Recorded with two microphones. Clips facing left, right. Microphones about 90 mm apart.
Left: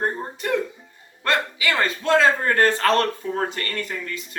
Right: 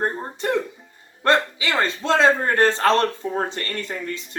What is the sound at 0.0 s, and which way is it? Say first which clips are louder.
A man's voice: right 1 dB; 30° right (ahead or behind).